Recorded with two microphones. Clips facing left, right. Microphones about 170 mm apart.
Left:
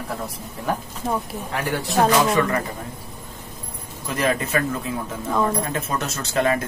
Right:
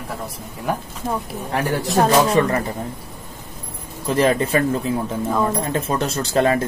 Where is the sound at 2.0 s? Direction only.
30° right (ahead or behind).